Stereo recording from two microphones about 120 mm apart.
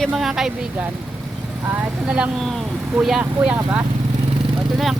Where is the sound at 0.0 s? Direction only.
Centre (ahead or behind).